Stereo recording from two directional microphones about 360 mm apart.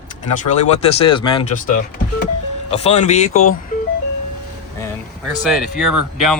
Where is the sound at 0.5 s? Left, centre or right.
Centre.